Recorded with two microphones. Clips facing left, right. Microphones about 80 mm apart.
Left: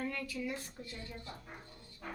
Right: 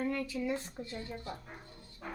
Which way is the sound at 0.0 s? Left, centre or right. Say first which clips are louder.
Right 5 dB; right.